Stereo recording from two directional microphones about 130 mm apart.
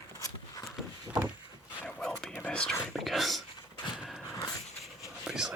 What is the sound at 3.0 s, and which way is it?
Dog, centre (ahead or behind).